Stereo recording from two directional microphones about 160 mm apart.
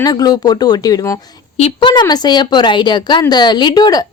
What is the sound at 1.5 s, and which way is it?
A woman's voice, 35° left (ahead or behind).